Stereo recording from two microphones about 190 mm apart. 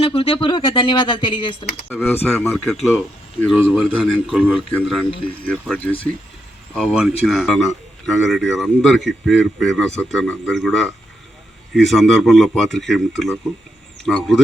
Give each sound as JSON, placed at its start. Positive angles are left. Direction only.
{"t": 0.0, "sound": "speech", "side_deg": 30}
{"t": 1.9, "sound": "speech", "side_deg": 10}
{"t": 3.5, "sound": "a man's voice", "side_deg": -5}